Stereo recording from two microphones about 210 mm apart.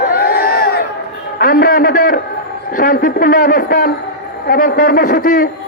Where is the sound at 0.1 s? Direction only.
45° left (ahead or behind).